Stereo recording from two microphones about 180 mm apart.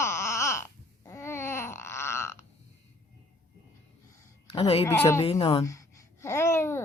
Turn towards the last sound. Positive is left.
turn(degrees=15)  # may be behind; listen again after turning